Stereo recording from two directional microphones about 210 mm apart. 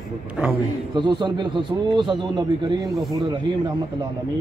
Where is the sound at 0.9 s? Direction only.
20° right (ahead or behind).